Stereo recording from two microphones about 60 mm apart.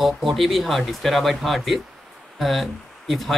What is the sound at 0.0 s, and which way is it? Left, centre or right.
Speech, centre.